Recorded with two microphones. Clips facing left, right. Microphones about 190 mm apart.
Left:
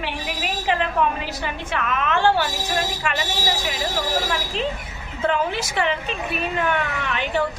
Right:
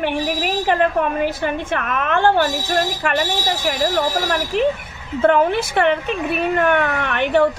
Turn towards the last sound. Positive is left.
turn(degrees=-60)  # may be behind; listen again after turning